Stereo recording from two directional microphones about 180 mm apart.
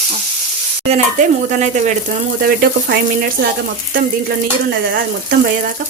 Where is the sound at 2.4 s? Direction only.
60° right (ahead or behind).